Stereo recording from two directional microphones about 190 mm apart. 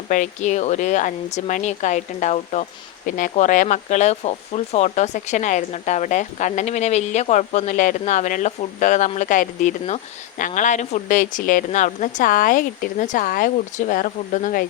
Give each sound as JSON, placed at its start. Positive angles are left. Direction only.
{"t": 0.1, "sound": "speech", "side_deg": 40}